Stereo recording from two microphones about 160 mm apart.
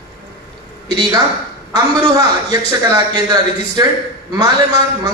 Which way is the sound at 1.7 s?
25° right (ahead or behind).